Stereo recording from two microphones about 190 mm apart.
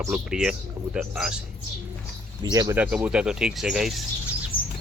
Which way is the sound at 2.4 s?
20° right (ahead or behind).